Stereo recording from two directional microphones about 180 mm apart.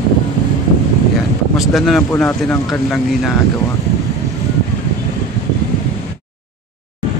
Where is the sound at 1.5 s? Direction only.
Centre (ahead or behind).